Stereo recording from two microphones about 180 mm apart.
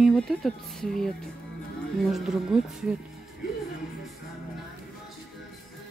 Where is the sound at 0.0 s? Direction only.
Centre (ahead or behind).